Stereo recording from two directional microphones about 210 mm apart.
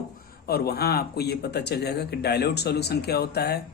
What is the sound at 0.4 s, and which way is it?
Speech, 50° left (ahead or behind).